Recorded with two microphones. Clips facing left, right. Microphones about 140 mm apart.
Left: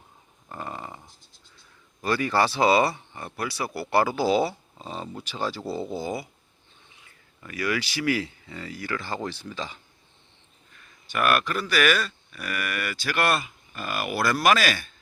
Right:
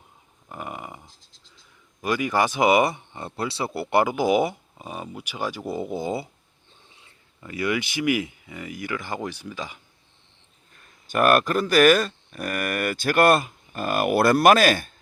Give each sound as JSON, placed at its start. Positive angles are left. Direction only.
{"t": 0.4, "sound": "a sound", "side_deg": -15}
{"t": 2.0, "sound": "speech", "side_deg": -15}
{"t": 11.1, "sound": "speech", "side_deg": -45}